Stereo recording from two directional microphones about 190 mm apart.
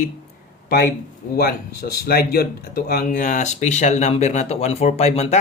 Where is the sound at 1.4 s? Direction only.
55° left (ahead or behind).